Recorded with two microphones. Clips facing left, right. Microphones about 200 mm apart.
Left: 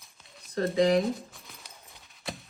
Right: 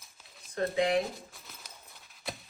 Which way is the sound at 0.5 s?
35° left (ahead or behind).